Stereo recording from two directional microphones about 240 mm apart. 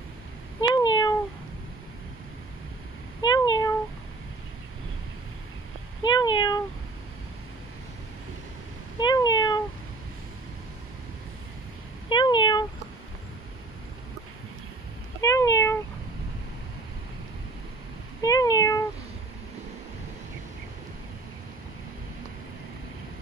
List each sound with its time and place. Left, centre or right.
0.6 s cat: centre
3.2 s cat: centre
6.0 s cat: centre
9.0 s cat: centre
12.1 s cat: centre
15.1 s cat: centre
18.2 s cat: centre